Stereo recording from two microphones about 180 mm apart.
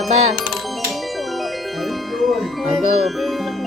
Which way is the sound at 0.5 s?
Centre (ahead or behind).